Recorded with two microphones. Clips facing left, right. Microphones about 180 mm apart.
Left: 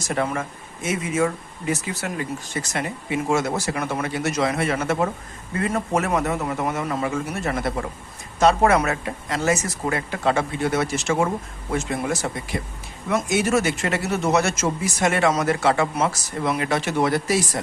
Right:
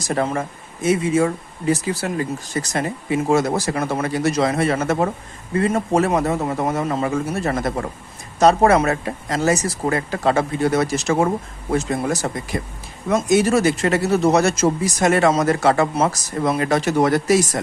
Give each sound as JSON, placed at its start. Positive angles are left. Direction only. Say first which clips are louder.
{"t": 0.0, "sound": "speech", "louder": "right 3 dB", "side_deg": -35}
{"t": 5.5, "sound": "speech", "louder": "right 5 dB", "side_deg": -30}